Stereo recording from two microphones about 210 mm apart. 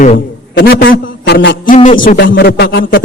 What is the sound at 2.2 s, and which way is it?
Speech, 55° left (ahead or behind).